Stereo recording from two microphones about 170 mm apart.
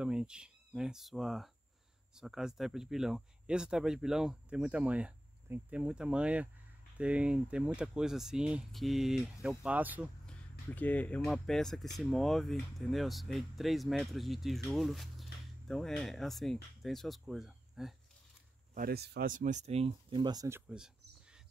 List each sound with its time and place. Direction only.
0.0 s speech: 5° right (ahead or behind)
10.7 s speech: 10° left (ahead or behind)
18.8 s speech: 65° right (ahead or behind); by 20.6 s 20° right (ahead or behind)
20.6 s cricket: 5° right (ahead or behind)